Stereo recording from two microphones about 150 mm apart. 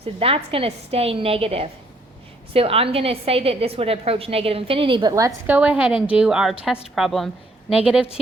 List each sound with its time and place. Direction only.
0.0 s a woman's voice: 40° right (ahead or behind)
5.5 s a woman's voice: 10° right (ahead or behind)